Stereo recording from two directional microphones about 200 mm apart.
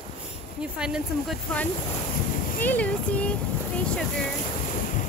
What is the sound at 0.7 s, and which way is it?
Speech, 5° right (ahead or behind).